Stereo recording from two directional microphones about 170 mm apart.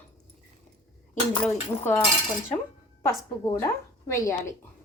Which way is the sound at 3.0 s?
20° left (ahead or behind).